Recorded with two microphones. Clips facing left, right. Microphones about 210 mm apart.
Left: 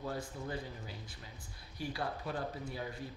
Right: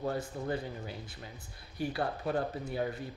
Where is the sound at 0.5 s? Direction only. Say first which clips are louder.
Right 6 dB; 60° right (ahead or behind).